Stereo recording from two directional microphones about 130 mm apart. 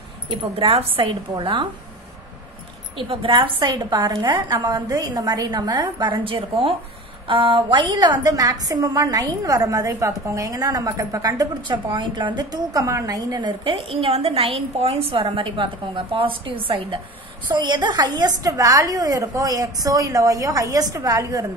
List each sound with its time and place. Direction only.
0.3 s a woman's voice: 40° right (ahead or behind)
3.0 s a woman's voice: 40° right (ahead or behind); by 21.5 s 25° right (ahead or behind)